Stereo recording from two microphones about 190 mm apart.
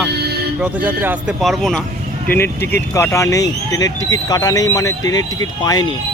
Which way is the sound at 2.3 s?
10° left (ahead or behind).